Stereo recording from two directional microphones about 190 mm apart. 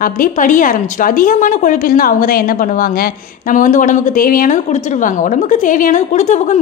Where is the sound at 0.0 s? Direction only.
45° left (ahead or behind).